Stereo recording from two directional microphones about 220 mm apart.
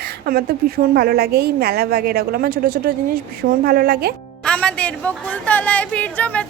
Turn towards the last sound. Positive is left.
turn(degrees=5)  # may be behind; listen again after turning